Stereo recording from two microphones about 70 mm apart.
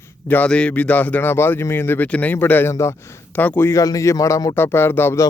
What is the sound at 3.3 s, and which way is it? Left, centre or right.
Speech, left.